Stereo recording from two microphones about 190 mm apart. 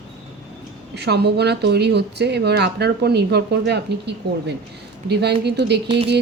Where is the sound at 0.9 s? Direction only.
60° right (ahead or behind).